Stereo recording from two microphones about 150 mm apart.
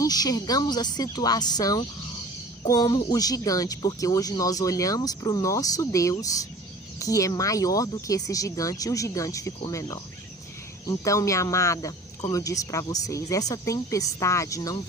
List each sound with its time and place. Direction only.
0.0 s speech: 25° left (ahead or behind)